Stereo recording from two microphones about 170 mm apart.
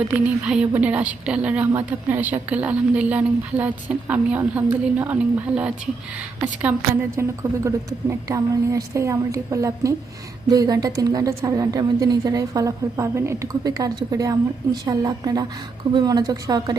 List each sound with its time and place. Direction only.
0.1 s a woman's voice: 5° right (ahead or behind); by 16.7 s 20° right (ahead or behind)